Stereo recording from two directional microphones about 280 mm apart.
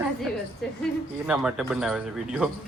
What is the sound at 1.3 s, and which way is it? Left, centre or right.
Speech, centre.